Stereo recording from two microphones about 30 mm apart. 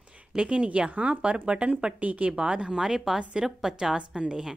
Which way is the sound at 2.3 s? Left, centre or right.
Right.